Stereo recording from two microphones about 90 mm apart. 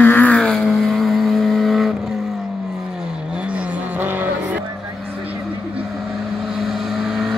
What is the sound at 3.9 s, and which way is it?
Vehicle, 20° right (ahead or behind).